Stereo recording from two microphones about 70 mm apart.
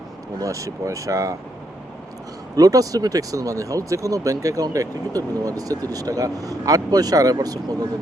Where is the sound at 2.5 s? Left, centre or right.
Right.